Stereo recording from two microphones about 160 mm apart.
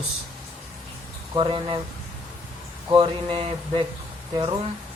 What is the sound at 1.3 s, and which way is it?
Speech, 35° right (ahead or behind).